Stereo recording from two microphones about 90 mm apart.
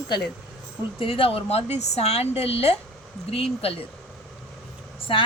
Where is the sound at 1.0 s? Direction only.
90° left.